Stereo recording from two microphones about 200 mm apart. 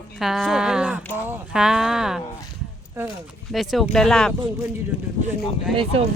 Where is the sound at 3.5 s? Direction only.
Centre (ahead or behind).